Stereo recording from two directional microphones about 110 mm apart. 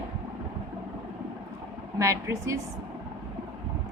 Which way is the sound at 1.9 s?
30° right (ahead or behind).